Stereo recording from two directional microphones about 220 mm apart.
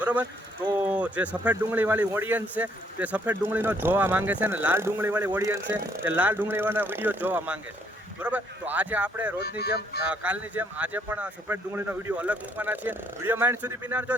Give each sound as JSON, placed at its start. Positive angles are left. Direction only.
{"t": 0.0, "sound": "speech", "side_deg": -5}
{"t": 9.4, "sound": "speech", "side_deg": 45}
{"t": 10.1, "sound": "speech", "side_deg": -5}